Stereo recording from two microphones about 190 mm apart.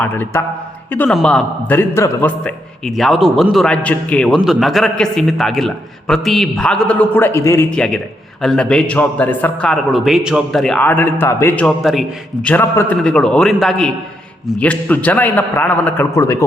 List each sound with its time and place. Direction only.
0.0 s a man's voice: 10° left (ahead or behind)